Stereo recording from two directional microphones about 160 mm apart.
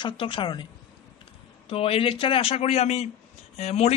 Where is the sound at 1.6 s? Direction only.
35° left (ahead or behind).